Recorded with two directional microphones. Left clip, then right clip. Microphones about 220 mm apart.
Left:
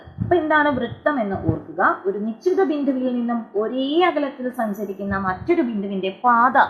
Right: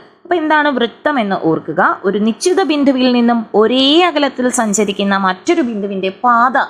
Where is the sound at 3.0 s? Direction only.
35° right (ahead or behind).